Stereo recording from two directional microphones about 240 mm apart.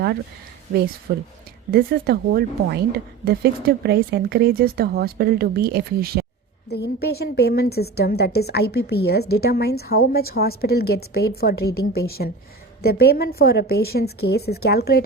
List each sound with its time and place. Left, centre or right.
1.1 s speech: right
6.7 s a woman's voice: left